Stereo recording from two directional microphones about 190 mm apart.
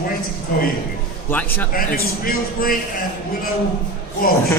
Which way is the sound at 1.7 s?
50° left (ahead or behind).